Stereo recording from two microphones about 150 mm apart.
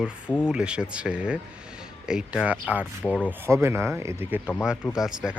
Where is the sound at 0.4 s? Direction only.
5° right (ahead or behind).